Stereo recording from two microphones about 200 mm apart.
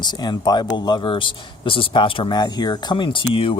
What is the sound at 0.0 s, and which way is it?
Speech, 20° left (ahead or behind).